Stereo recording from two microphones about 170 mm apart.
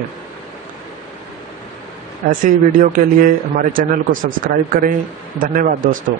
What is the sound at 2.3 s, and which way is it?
Speech, 50° right (ahead or behind).